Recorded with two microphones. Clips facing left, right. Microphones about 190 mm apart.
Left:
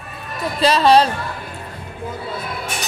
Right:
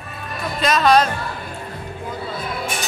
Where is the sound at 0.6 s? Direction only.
30° left (ahead or behind).